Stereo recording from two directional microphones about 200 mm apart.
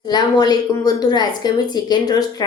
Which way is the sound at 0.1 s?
20° left (ahead or behind).